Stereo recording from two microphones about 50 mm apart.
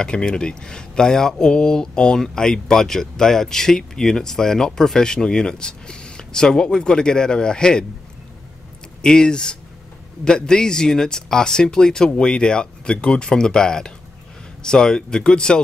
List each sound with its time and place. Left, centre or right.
0.0 s speech: centre
9.0 s speech: centre